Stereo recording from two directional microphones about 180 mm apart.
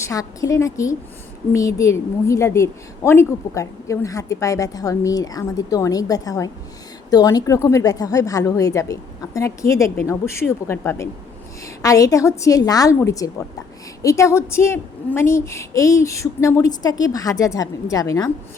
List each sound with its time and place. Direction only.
0.0 s a woman's voice: 20° left (ahead or behind)